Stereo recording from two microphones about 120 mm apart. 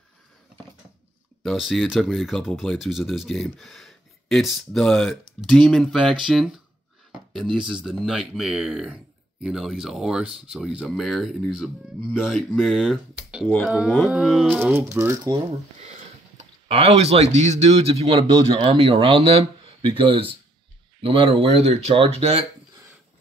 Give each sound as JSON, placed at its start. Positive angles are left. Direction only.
{"t": 1.4, "sound": "speech", "side_deg": 0}
{"t": 14.6, "sound": "speech", "side_deg": -20}
{"t": 15.8, "sound": "speech", "side_deg": -65}